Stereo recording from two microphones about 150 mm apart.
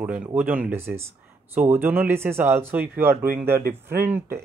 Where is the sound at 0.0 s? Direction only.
10° right (ahead or behind).